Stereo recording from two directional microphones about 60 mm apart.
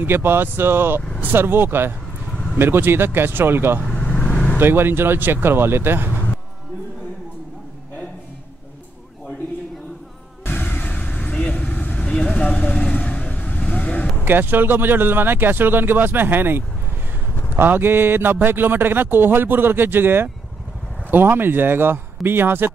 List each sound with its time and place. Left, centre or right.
0.0 s a man's voice: right
3.9 s vehicle: left
4.6 s a man's voice: right
10.4 s a sound: left
11.3 s vehicle: centre
14.2 s a man's voice: right